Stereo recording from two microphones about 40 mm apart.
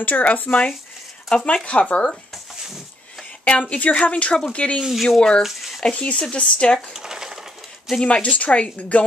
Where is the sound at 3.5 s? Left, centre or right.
Left.